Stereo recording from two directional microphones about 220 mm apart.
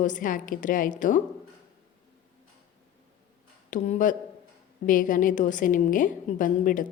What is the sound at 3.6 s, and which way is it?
A woman's voice, 35° left (ahead or behind).